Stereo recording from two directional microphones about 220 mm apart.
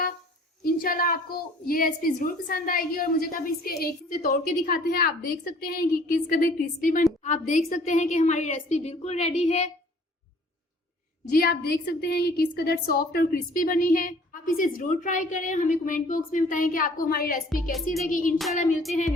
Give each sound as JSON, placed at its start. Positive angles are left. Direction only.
{"t": 0.6, "sound": "a woman's voice", "side_deg": 40}
{"t": 11.3, "sound": "a woman's voice", "side_deg": 45}